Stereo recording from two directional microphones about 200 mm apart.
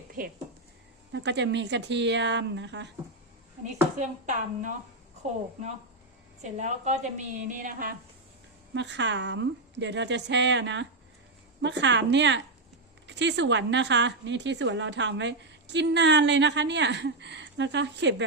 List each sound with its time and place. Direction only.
0.2 s speech: 45° right (ahead or behind)
1.1 s a woman's voice: 60° right (ahead or behind)
3.9 s a woman's voice: 40° right (ahead or behind)
6.4 s a woman's voice: 35° right (ahead or behind)
8.7 s a woman's voice: 60° right (ahead or behind)